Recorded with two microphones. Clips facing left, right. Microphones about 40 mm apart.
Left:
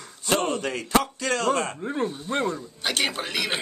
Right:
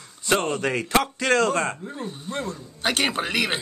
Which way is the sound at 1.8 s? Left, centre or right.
Left.